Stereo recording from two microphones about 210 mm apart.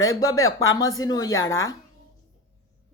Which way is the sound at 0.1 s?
15° left (ahead or behind).